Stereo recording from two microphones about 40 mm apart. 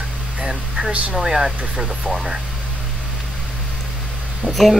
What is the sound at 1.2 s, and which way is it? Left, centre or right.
Speech, centre.